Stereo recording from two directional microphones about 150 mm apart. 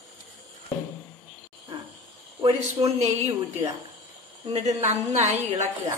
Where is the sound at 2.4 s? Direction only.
40° right (ahead or behind).